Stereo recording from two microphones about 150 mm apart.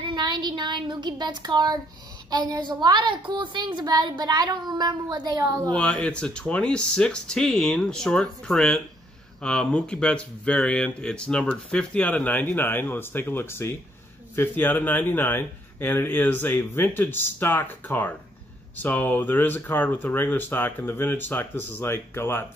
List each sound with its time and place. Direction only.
0.0 s a woman's voice: 30° right (ahead or behind)
5.7 s speech: 5° left (ahead or behind)